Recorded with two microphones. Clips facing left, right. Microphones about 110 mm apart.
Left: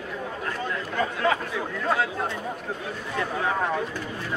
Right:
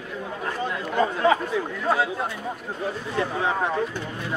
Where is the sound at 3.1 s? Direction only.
20° right (ahead or behind).